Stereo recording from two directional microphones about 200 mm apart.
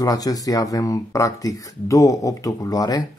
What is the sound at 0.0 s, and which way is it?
Speech, 20° left (ahead or behind).